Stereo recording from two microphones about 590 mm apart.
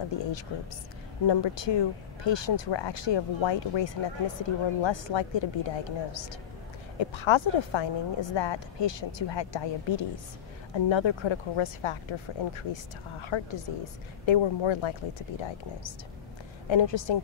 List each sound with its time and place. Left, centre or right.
0.5 s speech: left
16.6 s speech: left